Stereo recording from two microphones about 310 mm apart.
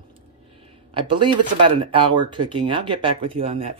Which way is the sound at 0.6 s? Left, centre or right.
Centre.